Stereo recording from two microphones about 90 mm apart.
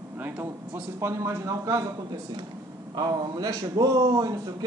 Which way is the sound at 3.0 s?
50° right (ahead or behind).